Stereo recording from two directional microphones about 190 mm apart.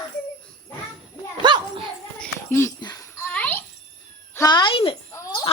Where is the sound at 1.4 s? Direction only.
25° right (ahead or behind).